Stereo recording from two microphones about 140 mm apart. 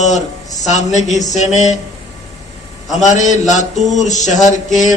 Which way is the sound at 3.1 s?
60° left (ahead or behind).